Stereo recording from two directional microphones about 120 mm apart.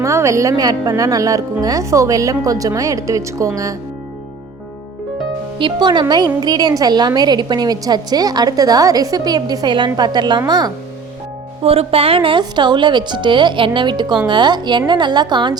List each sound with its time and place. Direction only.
0.0 s speech: 25° right (ahead or behind)
5.5 s a woman's voice: 40° right (ahead or behind)
11.6 s a woman's voice: 55° right (ahead or behind); by 15.5 s 40° right (ahead or behind)